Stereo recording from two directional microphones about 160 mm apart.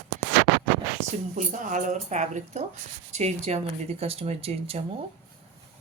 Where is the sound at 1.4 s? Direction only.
50° right (ahead or behind).